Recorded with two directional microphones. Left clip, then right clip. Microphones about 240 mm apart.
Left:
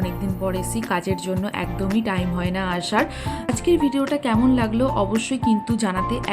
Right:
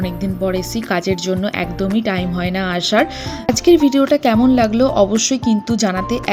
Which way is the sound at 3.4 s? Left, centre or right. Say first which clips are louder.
Right 8 dB; right.